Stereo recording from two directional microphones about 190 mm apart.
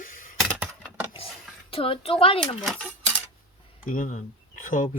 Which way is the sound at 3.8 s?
45° left (ahead or behind).